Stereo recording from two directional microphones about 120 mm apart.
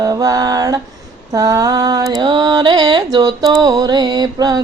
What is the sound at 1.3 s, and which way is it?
Mantra, 30° right (ahead or behind).